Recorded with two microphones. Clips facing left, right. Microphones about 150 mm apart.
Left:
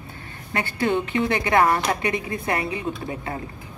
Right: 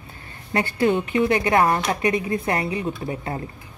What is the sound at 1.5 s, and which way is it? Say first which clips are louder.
Speech: left 2 dB; 20° right (ahead or behind).